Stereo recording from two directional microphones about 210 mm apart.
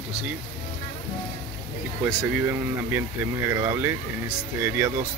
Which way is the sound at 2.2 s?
10° right (ahead or behind).